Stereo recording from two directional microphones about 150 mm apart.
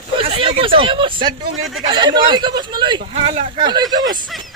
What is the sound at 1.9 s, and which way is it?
Speech, 30° right (ahead or behind).